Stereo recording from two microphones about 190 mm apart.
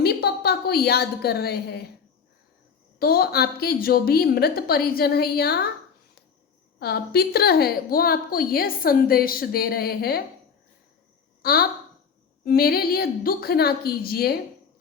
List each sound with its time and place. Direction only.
0.0 s a woman's voice: 55° left (ahead or behind)
3.0 s a woman's voice: 55° left (ahead or behind)
6.7 s a woman's voice: 55° left (ahead or behind)
11.4 s a woman's voice: 55° left (ahead or behind)